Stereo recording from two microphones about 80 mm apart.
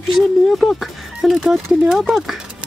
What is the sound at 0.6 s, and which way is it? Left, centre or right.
Speech, centre.